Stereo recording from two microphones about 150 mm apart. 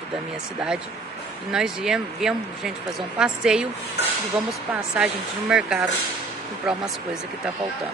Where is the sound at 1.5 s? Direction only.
5° right (ahead or behind).